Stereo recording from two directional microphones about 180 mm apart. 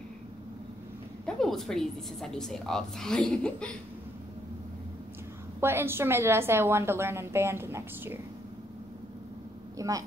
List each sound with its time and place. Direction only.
1.2 s a woman's voice: centre (ahead or behind)
5.6 s a woman's voice: 15° right (ahead or behind)
9.8 s speech: 20° right (ahead or behind)